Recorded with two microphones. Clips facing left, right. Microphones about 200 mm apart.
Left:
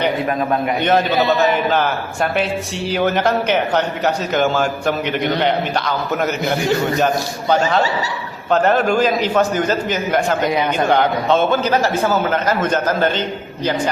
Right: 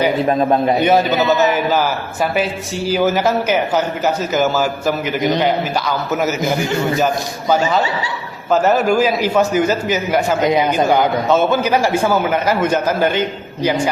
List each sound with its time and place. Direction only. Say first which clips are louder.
0.3 s a man's voice: right 4 dB; 30° right (ahead or behind)
0.8 s a man's voice: right 2 dB; 10° right (ahead or behind)
8.4 s a man's voice: right 1 dB; 5° right (ahead or behind)
10.4 s a man's voice: right 3 dB; 20° right (ahead or behind)
10.8 s a man's voice: right 1 dB; 5° right (ahead or behind)